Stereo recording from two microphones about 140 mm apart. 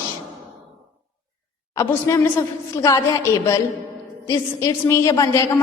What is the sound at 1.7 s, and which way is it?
A woman's voice, 20° left (ahead or behind).